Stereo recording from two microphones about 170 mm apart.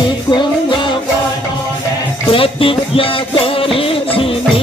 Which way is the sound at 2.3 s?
30° left (ahead or behind).